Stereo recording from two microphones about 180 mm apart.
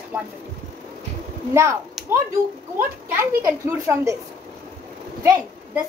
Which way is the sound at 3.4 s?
15° right (ahead or behind).